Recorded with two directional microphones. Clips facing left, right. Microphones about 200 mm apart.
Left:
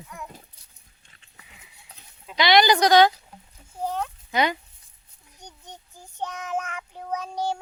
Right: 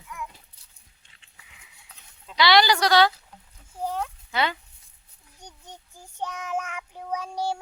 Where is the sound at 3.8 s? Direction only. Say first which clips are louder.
Left 1 dB; 10° right (ahead or behind).